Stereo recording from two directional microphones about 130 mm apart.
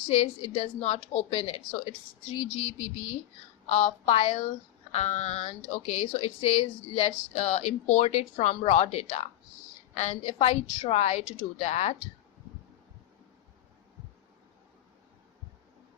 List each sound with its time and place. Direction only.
0.1 s a woman's voice: 50° left (ahead or behind)